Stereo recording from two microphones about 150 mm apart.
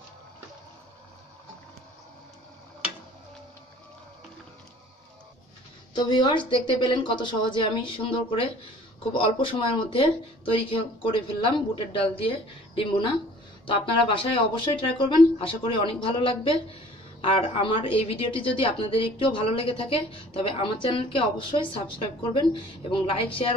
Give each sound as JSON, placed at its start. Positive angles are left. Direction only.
{"t": 5.9, "sound": "a woman's voice", "side_deg": 30}